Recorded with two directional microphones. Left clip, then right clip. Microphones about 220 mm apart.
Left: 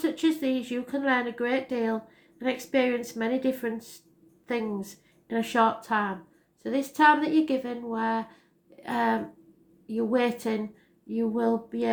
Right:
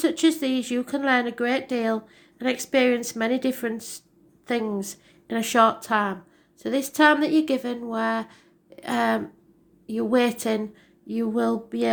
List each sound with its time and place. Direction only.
0.0 s a woman's voice: 45° right (ahead or behind)